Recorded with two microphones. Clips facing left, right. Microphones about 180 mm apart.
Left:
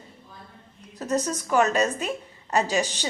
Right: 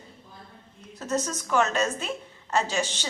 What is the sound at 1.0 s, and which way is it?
A woman's voice, 15° left (ahead or behind).